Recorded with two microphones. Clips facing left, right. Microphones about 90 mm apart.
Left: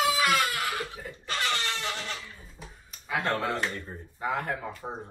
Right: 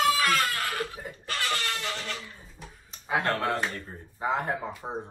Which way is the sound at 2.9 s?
25° right (ahead or behind).